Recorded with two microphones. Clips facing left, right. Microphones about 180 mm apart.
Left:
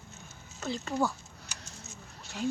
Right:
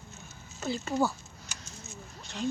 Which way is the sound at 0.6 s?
5° right (ahead or behind).